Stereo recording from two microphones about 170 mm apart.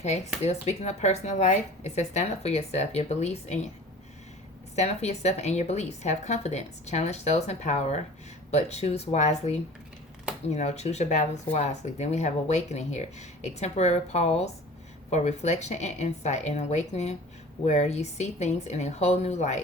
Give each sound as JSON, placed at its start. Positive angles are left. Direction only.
{"t": 0.4, "sound": "speech", "side_deg": 40}
{"t": 4.7, "sound": "speech", "side_deg": 40}